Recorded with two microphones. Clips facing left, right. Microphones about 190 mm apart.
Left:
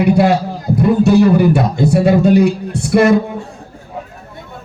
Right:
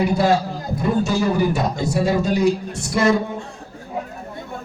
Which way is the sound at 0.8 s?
65° left (ahead or behind).